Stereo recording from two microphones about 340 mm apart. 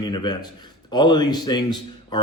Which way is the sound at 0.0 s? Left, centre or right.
Centre.